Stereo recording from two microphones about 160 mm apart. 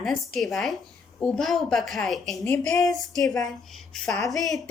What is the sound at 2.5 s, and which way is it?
Speech, 15° left (ahead or behind).